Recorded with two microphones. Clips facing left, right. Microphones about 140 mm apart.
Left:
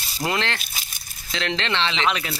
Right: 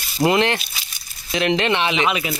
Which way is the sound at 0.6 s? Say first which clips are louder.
Right 1 dB; 50° left (ahead or behind).